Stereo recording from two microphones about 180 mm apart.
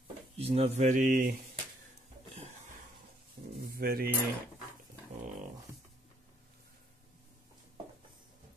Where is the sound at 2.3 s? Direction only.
35° right (ahead or behind).